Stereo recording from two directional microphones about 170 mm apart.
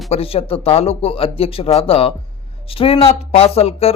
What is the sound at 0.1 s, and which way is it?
Speech, 35° left (ahead or behind).